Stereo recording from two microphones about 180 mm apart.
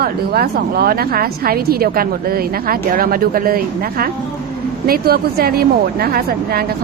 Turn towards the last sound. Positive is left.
turn(degrees=-60)  # may be behind; listen again after turning